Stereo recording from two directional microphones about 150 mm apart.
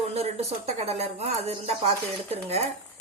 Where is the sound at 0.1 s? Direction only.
45° right (ahead or behind).